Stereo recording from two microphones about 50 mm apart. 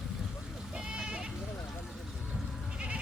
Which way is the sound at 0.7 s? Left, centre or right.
Centre.